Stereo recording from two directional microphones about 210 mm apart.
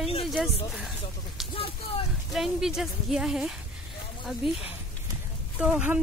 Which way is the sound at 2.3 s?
Centre (ahead or behind).